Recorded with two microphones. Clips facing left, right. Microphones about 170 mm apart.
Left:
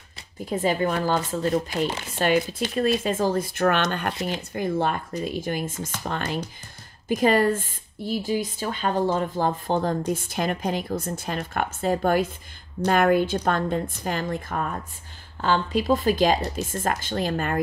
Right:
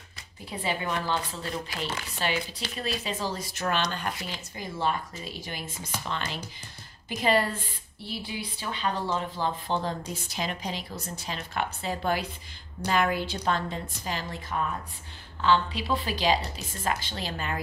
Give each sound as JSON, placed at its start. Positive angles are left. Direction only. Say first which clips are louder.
{"t": 0.5, "sound": "a woman's voice", "louder": "left 8 dB", "side_deg": 45}